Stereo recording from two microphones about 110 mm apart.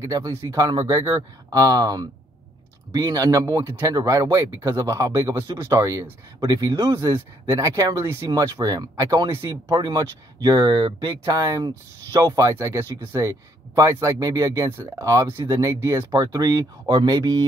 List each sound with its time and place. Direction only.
0.0 s speech: 30° right (ahead or behind); by 11.1 s 50° right (ahead or behind)
11.2 s speech: 35° right (ahead or behind)